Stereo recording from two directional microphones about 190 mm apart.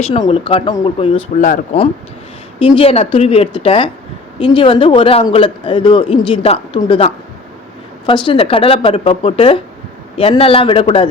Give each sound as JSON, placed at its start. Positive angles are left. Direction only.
{"t": 0.1, "sound": "a man's voice", "side_deg": 30}
{"t": 1.4, "sound": "speech", "side_deg": 45}
{"t": 2.6, "sound": "a man's voice", "side_deg": 25}